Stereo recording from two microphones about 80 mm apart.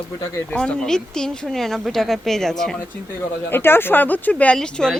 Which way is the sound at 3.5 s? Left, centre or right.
Left.